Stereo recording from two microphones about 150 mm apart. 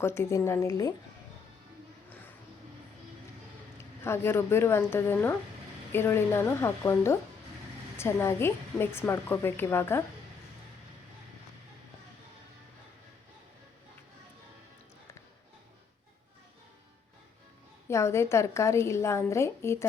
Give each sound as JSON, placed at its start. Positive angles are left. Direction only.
{"t": 0.0, "sound": "a woman's voice", "side_deg": 15}
{"t": 3.8, "sound": "a woman's voice", "side_deg": 15}
{"t": 17.8, "sound": "a woman's voice", "side_deg": 15}